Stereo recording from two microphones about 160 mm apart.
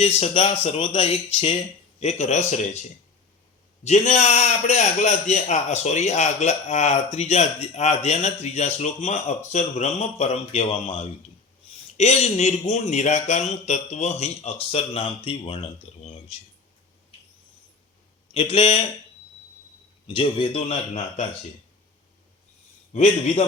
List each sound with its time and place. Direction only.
0.0 s a man's voice: 40° left (ahead or behind)
3.8 s a man's voice: 45° left (ahead or behind)
18.3 s speech: 35° left (ahead or behind)
20.1 s speech: 35° left (ahead or behind)
22.9 s a man's voice: 45° left (ahead or behind)